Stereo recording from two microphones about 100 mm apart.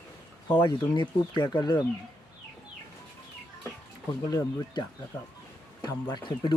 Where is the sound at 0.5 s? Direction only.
50° left (ahead or behind).